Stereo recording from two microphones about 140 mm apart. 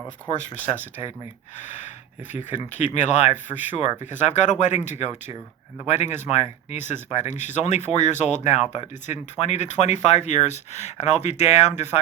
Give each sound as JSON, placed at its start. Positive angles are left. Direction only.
{"t": 0.3, "sound": "speech", "side_deg": 55}